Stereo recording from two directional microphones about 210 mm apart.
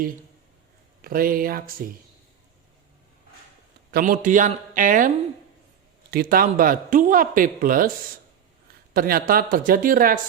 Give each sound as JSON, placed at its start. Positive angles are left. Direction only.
{"t": 1.0, "sound": "speech", "side_deg": -45}
{"t": 3.9, "sound": "speech", "side_deg": -40}
{"t": 8.9, "sound": "speech", "side_deg": -45}